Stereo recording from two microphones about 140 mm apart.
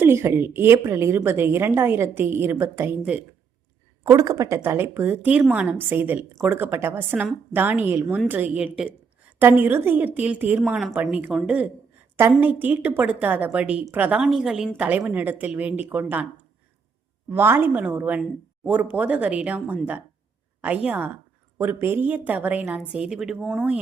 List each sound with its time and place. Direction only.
0.0 s a woman's voice: 20° right (ahead or behind)
4.0 s a woman's voice: 25° right (ahead or behind)
17.2 s a woman's voice: 15° right (ahead or behind)